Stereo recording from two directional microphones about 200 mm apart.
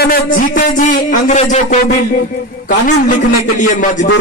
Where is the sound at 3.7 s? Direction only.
40° left (ahead or behind).